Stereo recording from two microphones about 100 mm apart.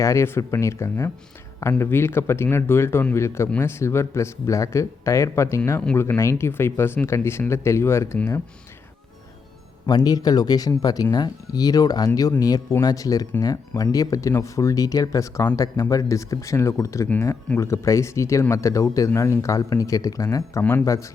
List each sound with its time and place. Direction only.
0.0 s speech: 30° left (ahead or behind)
9.8 s speech: 40° left (ahead or behind)